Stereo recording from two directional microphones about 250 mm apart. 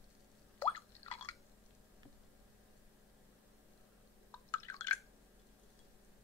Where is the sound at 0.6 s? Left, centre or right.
Centre.